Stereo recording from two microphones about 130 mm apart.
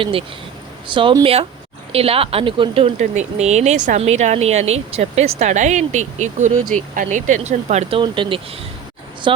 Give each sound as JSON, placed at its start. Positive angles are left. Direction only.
{"t": 0.0, "sound": "speech", "side_deg": -45}
{"t": 3.0, "sound": "speech", "side_deg": -60}
{"t": 7.9, "sound": "speech", "side_deg": -40}